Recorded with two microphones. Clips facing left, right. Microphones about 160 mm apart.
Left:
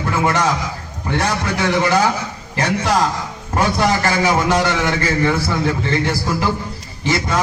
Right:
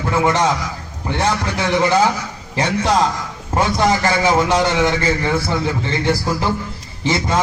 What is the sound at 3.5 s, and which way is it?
A man's voice, 25° right (ahead or behind).